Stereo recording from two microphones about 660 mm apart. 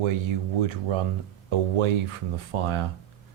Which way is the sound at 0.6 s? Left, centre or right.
Right.